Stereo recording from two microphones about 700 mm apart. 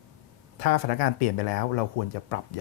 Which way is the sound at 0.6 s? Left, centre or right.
Left.